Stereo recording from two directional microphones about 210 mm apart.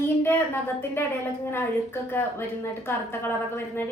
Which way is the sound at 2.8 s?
10° left (ahead or behind).